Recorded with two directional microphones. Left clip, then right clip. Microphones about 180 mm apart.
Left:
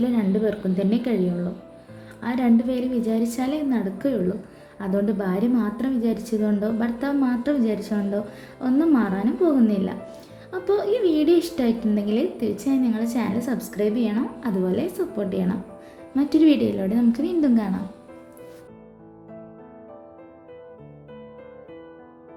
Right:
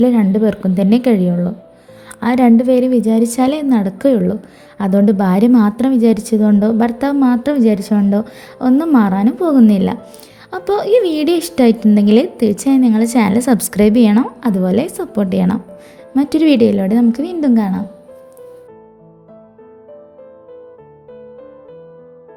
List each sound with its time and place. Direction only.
0.0 s a woman's voice: 45° right (ahead or behind)